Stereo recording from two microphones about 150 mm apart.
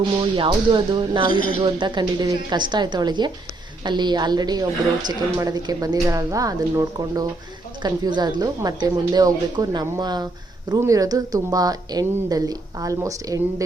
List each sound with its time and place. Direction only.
0.2 s a woman's voice: 35° right (ahead or behind)